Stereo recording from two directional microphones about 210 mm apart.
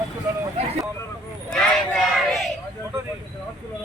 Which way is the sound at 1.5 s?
5° left (ahead or behind).